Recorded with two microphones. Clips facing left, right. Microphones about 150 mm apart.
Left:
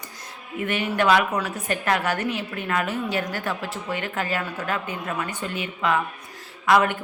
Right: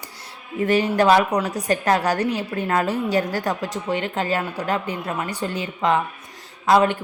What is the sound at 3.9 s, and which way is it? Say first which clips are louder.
Speech: right 4 dB; 20° right (ahead or behind).